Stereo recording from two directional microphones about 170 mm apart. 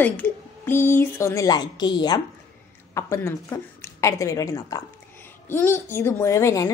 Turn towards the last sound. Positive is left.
turn(degrees=20)  # may be behind; listen again after turning